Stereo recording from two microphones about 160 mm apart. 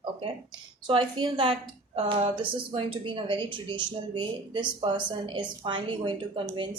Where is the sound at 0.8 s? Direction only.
30° right (ahead or behind).